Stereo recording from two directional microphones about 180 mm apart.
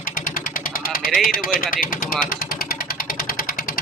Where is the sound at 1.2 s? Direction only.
50° left (ahead or behind).